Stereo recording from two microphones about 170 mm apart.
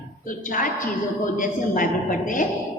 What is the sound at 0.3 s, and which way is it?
A woman's voice, 55° left (ahead or behind).